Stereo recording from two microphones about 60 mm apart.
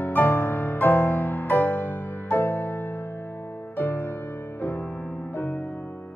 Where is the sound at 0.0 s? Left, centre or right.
Left.